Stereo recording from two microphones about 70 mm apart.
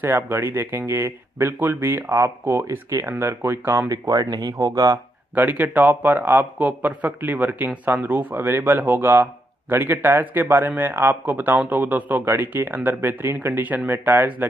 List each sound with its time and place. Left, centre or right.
0.0 s speech: right
2.0 s speech: right
3.9 s speech: right
4.6 s speech: right
5.3 s speech: right